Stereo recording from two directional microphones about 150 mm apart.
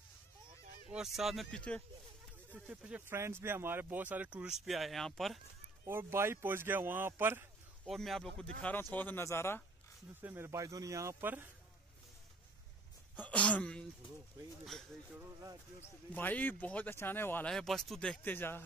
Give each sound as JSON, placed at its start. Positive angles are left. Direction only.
{"t": 0.7, "sound": "honk", "side_deg": -65}
{"t": 0.9, "sound": "speech", "side_deg": -5}
{"t": 2.7, "sound": "speech", "side_deg": -10}
{"t": 5.9, "sound": "speech", "side_deg": -15}
{"t": 7.8, "sound": "speech", "side_deg": 0}
{"t": 10.2, "sound": "speech", "side_deg": -15}
{"t": 13.1, "sound": "a sound", "side_deg": 10}
{"t": 14.6, "sound": "speech", "side_deg": 0}